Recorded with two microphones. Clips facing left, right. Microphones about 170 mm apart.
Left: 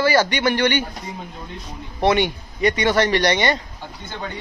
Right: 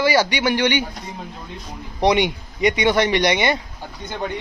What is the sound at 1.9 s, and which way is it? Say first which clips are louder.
Speech: right 1 dB; 15° right (ahead or behind).